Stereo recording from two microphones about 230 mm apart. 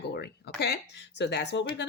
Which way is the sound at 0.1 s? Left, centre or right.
Left.